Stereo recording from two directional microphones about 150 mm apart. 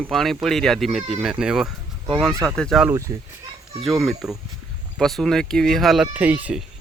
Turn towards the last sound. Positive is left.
turn(degrees=-10)  # may be behind; listen again after turning